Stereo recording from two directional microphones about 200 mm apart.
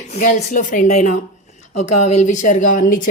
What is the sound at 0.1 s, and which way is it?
Speech, 35° left (ahead or behind).